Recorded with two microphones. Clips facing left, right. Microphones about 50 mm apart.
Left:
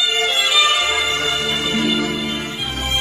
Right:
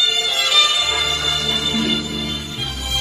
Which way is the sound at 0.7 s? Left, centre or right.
Left.